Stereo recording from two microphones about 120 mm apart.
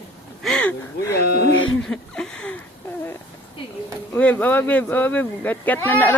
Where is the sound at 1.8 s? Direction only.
5° left (ahead or behind).